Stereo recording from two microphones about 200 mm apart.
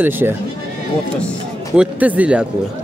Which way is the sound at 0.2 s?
10° right (ahead or behind).